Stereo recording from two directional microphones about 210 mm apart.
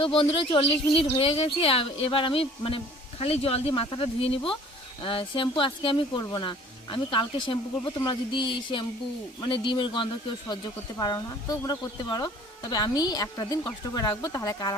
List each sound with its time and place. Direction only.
0.0 s speech: 25° left (ahead or behind)